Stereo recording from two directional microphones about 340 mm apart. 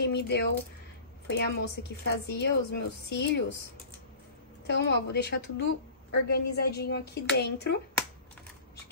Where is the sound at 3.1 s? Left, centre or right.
Left.